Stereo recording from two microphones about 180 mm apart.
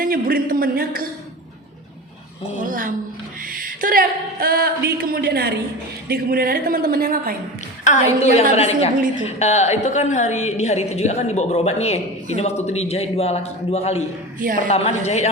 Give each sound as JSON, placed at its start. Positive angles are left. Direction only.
{"t": 0.0, "sound": "a man's voice", "side_deg": -55}
{"t": 2.6, "sound": "a woman's voice", "side_deg": -50}
{"t": 7.9, "sound": "a woman's voice", "side_deg": 40}
{"t": 14.3, "sound": "a man's voice", "side_deg": -50}
{"t": 14.7, "sound": "a woman's voice", "side_deg": 35}